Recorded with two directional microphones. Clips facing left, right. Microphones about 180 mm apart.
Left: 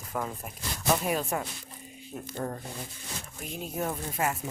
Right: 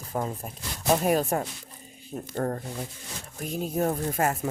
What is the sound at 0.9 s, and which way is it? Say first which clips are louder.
Speech: right 5 dB; 40° right (ahead or behind).